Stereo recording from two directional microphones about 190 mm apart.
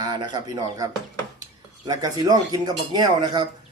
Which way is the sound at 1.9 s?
20° right (ahead or behind).